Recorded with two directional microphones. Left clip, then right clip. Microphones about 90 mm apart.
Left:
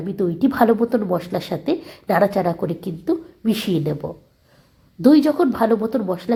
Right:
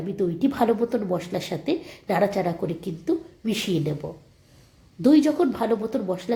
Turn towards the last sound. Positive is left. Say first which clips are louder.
# left 5 dB
turn(degrees=40)  # may be behind; listen again after turning